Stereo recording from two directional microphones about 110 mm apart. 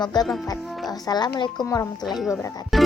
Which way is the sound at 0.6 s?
Centre (ahead or behind).